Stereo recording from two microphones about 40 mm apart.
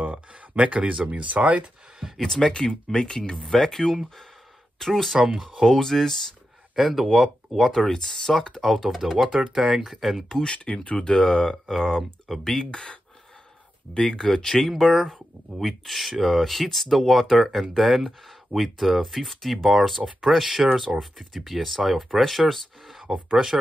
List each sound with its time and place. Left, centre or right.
0.0 s a sound: right
1.1 s speech: right
2.1 s speech: centre
2.5 s speech: left; by 7.7 s centre
7.7 s speech: centre
9.9 s speech: centre
10.2 s speech: centre
11.6 s speech: centre
12.7 s speech: left
14.7 s speech: centre
23.0 s speech: centre